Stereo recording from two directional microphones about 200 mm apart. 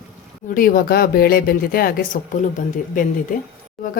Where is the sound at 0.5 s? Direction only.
45° left (ahead or behind).